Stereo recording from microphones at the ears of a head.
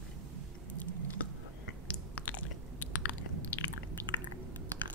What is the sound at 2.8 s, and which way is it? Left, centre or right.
Chewing, left.